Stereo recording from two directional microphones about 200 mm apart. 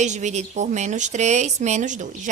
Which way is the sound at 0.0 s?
35° right (ahead or behind).